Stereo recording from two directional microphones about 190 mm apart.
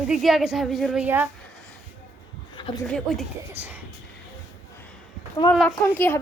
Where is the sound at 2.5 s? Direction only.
25° left (ahead or behind).